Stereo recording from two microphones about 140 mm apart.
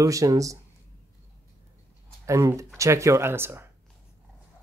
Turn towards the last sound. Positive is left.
turn(degrees=-15)  # may be behind; listen again after turning